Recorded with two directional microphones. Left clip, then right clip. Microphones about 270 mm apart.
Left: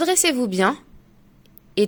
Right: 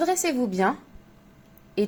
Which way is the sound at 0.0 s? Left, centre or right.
Left.